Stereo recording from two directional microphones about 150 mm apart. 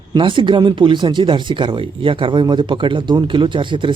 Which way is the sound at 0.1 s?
35° right (ahead or behind).